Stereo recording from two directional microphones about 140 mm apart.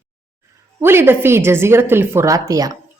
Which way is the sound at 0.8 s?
15° right (ahead or behind).